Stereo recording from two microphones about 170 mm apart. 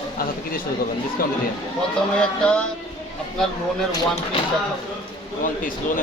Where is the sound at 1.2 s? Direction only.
60° left (ahead or behind).